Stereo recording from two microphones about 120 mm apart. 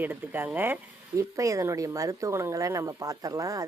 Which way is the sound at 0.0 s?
15° right (ahead or behind).